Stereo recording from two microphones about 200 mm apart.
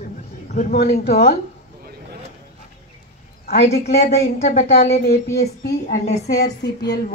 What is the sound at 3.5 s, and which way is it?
Speech, 35° left (ahead or behind).